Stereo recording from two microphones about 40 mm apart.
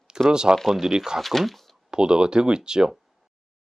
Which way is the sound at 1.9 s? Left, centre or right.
Right.